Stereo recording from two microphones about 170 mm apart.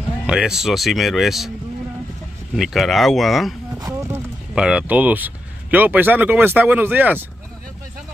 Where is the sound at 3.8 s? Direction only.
15° right (ahead or behind).